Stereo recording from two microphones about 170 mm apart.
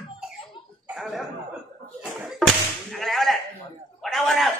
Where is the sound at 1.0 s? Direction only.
Centre (ahead or behind).